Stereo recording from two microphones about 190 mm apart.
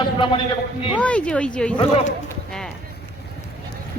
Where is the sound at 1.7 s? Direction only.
30° left (ahead or behind).